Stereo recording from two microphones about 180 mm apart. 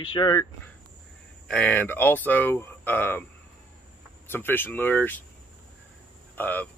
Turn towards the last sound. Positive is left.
turn(degrees=10)  # may be behind; listen again after turning